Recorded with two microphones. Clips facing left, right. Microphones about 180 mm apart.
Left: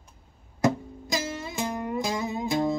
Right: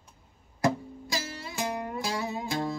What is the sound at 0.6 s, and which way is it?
Music, 20° left (ahead or behind).